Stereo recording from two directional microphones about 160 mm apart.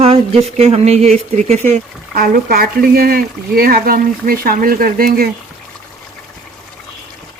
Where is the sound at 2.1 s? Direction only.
65° right (ahead or behind).